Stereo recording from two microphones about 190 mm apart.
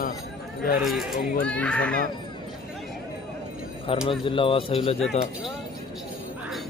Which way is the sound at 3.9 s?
30° left (ahead or behind).